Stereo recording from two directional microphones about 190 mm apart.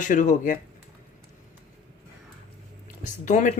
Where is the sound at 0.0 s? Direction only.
40° left (ahead or behind).